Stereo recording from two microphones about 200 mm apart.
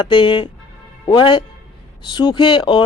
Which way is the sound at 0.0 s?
25° left (ahead or behind).